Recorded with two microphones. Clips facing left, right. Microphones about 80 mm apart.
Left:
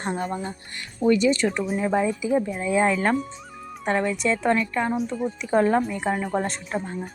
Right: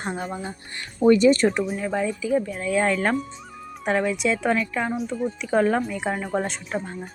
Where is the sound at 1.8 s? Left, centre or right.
Centre.